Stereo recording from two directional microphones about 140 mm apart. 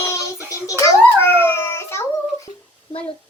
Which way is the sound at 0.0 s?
20° left (ahead or behind).